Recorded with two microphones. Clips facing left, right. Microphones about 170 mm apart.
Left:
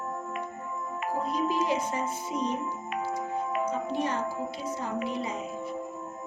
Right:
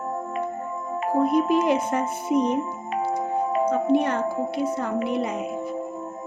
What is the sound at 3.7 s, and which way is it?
Speech, 65° right (ahead or behind).